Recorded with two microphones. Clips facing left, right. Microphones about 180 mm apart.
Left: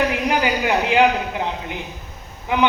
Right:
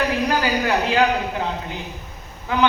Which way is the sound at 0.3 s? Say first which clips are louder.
Left 1 dB; 20° left (ahead or behind).